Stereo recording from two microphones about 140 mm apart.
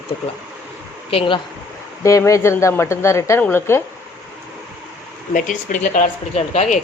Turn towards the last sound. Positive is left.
turn(degrees=55)  # may be behind; listen again after turning